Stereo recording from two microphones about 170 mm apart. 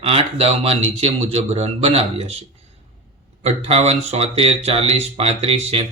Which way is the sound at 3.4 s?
40° right (ahead or behind).